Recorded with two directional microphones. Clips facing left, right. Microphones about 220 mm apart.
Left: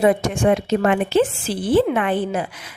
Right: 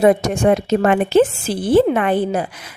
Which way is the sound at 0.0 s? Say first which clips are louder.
Right 3 dB; 40° right (ahead or behind).